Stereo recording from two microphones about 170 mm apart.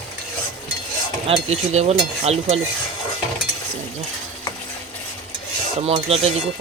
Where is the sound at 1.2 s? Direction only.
40° right (ahead or behind).